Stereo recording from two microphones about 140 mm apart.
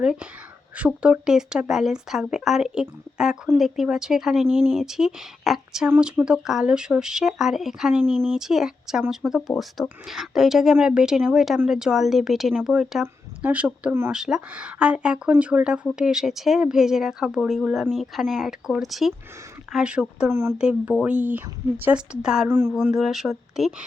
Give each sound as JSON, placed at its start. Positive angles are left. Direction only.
{"t": 0.0, "sound": "speech", "side_deg": -5}
{"t": 22.4, "sound": "speech", "side_deg": -15}
{"t": 22.7, "sound": "speech", "side_deg": 0}